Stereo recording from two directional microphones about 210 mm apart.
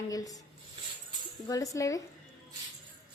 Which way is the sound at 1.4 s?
15° left (ahead or behind).